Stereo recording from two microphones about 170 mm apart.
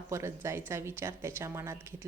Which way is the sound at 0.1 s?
15° right (ahead or behind).